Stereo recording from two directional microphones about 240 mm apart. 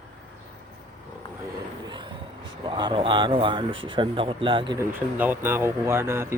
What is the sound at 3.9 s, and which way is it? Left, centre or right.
Speech, right.